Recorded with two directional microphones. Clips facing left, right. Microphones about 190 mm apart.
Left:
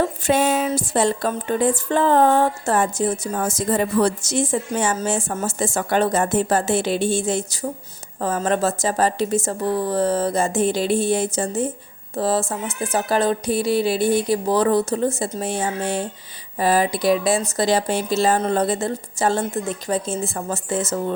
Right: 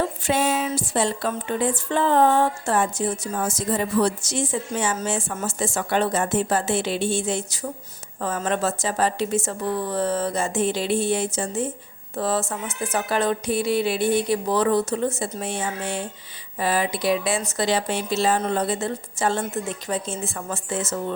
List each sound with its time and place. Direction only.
0.3 s speech: 50° left (ahead or behind)